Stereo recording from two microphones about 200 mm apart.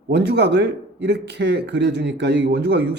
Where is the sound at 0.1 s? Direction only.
60° right (ahead or behind).